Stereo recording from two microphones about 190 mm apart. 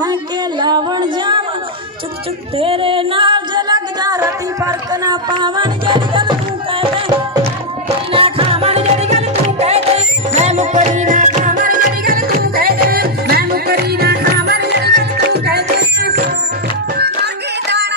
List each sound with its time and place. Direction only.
0.0 s child singing: 20° right (ahead or behind)
2.6 s music: 30° right (ahead or behind); by 17.8 s 60° right (ahead or behind)